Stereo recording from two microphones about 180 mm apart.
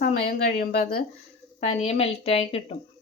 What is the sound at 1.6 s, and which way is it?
Speech, 35° left (ahead or behind).